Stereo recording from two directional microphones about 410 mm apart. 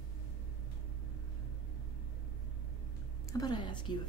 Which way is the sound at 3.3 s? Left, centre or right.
Centre.